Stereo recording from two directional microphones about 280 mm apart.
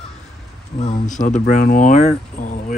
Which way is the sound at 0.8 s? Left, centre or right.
Left.